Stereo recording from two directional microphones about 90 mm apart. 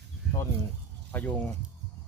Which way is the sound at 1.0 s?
20° left (ahead or behind).